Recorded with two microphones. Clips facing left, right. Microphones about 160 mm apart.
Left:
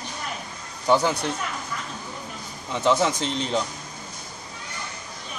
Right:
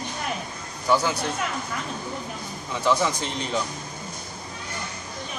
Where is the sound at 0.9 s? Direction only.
20° left (ahead or behind).